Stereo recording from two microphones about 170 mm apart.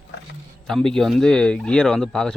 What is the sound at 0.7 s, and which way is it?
Speech, 5° left (ahead or behind).